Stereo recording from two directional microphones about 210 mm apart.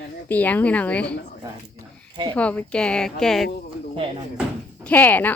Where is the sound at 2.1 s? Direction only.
25° right (ahead or behind).